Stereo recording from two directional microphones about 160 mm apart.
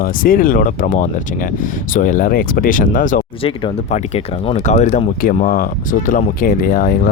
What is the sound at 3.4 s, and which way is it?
Speech, 35° left (ahead or behind).